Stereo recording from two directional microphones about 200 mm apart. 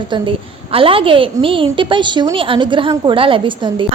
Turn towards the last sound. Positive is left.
turn(degrees=-25)  # may be behind; listen again after turning